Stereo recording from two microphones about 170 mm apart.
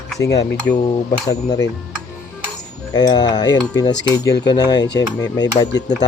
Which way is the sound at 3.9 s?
90° left.